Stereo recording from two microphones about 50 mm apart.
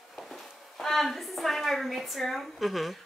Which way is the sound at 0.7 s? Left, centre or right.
Centre.